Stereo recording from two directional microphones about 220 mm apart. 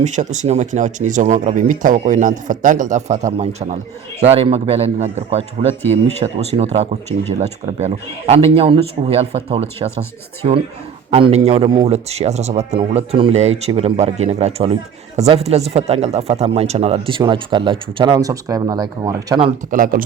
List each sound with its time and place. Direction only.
0.0 s speech: 30° right (ahead or behind)
11.1 s speech: 25° right (ahead or behind)
19.7 s speech: 40° right (ahead or behind)